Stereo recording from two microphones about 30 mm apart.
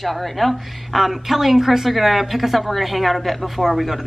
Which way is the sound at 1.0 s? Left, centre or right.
Centre.